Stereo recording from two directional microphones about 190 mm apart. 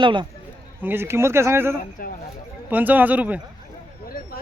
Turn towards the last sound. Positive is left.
turn(degrees=-10)  # may be behind; listen again after turning